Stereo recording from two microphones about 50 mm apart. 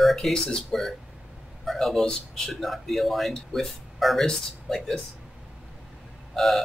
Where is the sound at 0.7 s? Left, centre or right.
Centre.